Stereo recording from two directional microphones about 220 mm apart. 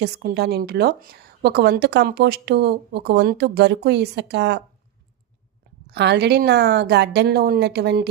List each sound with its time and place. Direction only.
0.0 s a woman's voice: 45° right (ahead or behind)
5.9 s a woman's voice: 50° right (ahead or behind)